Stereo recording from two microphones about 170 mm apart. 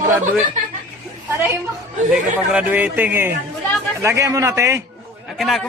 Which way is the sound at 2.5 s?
10° right (ahead or behind).